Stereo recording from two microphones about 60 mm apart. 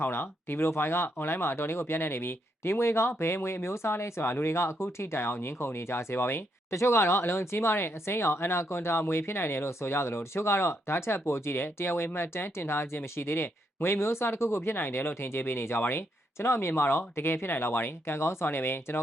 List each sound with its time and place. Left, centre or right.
0.0 s speech: left